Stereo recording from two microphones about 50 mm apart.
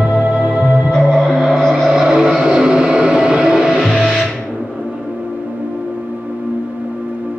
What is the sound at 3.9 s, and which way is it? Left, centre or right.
Music, centre.